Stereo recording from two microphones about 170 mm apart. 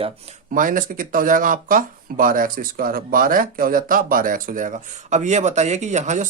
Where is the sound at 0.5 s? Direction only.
55° right (ahead or behind).